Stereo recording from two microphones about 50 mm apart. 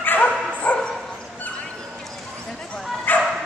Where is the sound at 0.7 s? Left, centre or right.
Left.